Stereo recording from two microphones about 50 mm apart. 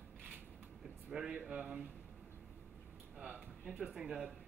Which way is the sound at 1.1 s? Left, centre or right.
Right.